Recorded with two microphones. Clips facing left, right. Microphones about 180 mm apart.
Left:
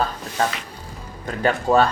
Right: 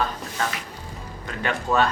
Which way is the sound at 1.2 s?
35° left (ahead or behind).